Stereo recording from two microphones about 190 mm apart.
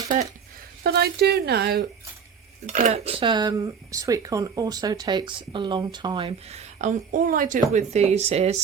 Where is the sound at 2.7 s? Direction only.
40° right (ahead or behind).